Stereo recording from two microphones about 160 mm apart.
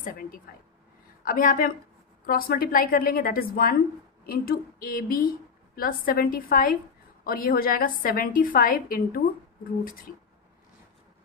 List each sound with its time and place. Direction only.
0.5 s speech: 70° left (ahead or behind)
1.2 s a woman's voice: 60° left (ahead or behind)